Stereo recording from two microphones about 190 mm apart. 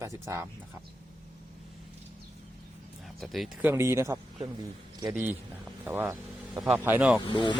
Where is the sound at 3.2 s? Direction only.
Centre (ahead or behind).